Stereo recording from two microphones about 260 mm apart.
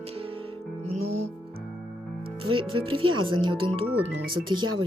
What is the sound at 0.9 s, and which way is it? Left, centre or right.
Music, right.